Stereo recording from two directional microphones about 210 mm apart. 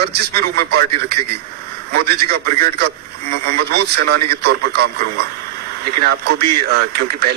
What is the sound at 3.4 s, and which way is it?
Speech, 50° right (ahead or behind).